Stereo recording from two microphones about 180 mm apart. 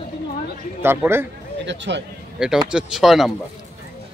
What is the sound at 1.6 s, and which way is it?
Speech, 80° right.